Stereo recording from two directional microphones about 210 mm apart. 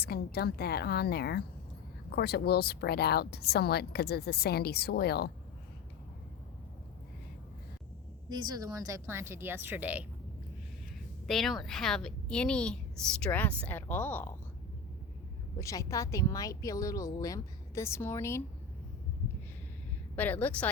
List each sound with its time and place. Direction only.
0.0 s speech: 50° left (ahead or behind)
8.3 s speech: 20° right (ahead or behind)
11.3 s a woman's voice: centre (ahead or behind)
15.5 s speech: 15° left (ahead or behind)
20.1 s speech: 10° left (ahead or behind)